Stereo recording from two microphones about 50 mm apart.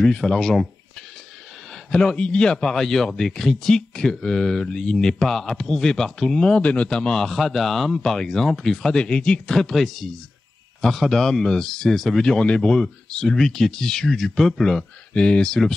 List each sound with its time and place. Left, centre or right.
0.0 s a man's voice: centre
1.9 s a man's voice: centre
6.6 s speech: left
7.0 s a man's voice: centre